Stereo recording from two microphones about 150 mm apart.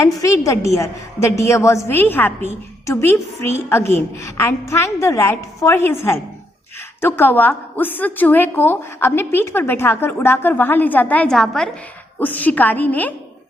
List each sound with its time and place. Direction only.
0.0 s a woman's voice: 20° left (ahead or behind)
7.0 s a woman's voice: 15° left (ahead or behind)